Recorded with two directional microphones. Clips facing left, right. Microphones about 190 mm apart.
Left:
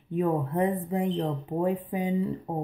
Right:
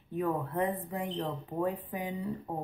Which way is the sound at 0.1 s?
20° left (ahead or behind).